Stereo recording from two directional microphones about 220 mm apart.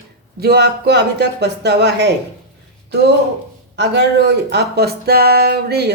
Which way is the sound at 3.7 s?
50° right (ahead or behind).